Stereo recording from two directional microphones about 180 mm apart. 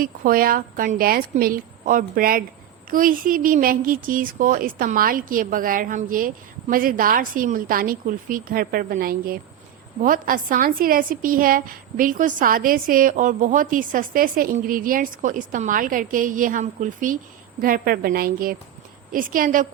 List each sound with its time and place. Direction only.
0.0 s a woman's voice: 50° right (ahead or behind)